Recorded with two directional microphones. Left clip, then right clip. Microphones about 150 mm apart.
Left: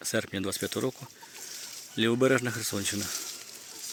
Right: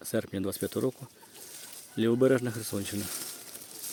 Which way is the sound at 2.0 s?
15° right (ahead or behind).